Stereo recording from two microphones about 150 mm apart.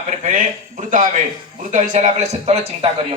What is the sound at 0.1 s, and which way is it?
A man's voice, 55° right (ahead or behind).